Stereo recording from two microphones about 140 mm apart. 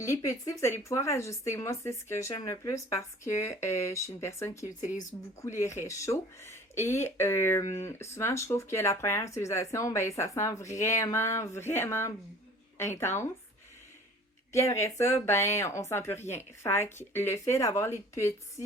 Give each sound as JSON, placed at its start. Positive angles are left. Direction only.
{"t": 0.0, "sound": "speech", "side_deg": 20}
{"t": 4.8, "sound": "speech", "side_deg": 65}
{"t": 5.4, "sound": "speech", "side_deg": 20}
{"t": 14.5, "sound": "speech", "side_deg": 20}